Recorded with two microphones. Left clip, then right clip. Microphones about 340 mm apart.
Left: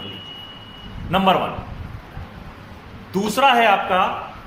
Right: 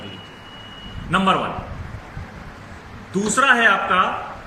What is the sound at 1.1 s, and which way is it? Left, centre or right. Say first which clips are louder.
Speech: left 1 dB; centre.